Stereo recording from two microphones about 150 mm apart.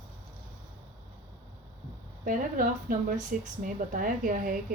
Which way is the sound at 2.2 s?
65° right (ahead or behind).